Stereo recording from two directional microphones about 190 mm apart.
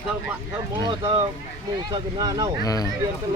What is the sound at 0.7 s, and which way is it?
Speech, 25° right (ahead or behind).